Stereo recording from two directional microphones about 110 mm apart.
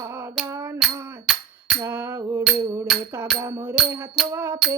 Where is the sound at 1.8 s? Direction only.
25° right (ahead or behind).